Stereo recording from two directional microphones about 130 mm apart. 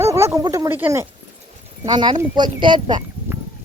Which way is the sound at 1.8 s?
35° right (ahead or behind).